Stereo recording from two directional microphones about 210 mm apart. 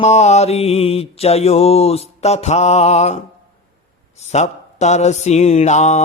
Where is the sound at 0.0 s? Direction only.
30° left (ahead or behind).